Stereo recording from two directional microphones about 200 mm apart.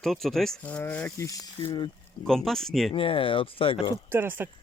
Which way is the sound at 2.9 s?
25° left (ahead or behind).